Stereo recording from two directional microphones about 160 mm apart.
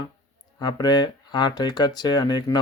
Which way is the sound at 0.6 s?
25° left (ahead or behind).